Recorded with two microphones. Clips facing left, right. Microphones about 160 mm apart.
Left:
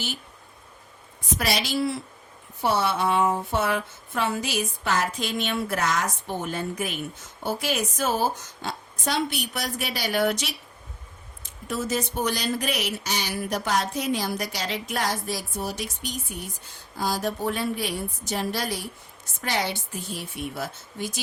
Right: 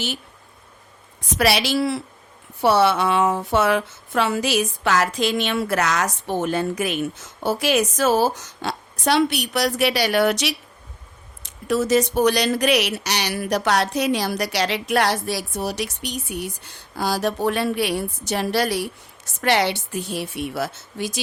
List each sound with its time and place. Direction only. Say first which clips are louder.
1.4 s speech: right 6 dB; 75° right (ahead or behind)